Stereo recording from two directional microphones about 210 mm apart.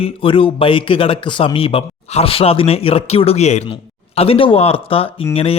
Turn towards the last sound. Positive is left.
turn(degrees=30)  # may be behind; listen again after turning